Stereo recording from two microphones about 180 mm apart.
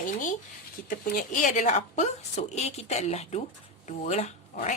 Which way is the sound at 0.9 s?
45° left (ahead or behind).